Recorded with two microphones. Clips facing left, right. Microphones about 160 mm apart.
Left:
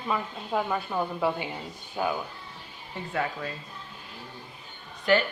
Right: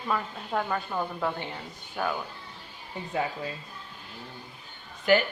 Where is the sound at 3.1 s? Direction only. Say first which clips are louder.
Even; 20° right (ahead or behind).